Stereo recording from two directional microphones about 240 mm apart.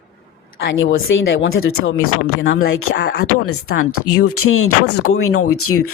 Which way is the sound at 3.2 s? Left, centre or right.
Left.